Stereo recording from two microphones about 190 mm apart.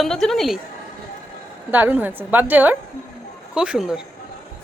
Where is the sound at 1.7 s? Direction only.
10° right (ahead or behind).